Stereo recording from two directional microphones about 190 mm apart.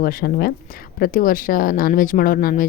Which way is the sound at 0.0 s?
50° left (ahead or behind).